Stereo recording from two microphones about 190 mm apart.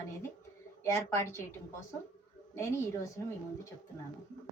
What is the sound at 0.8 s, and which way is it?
A woman's voice, 15° left (ahead or behind).